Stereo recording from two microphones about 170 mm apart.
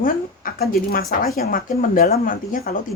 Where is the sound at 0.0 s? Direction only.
55° left (ahead or behind).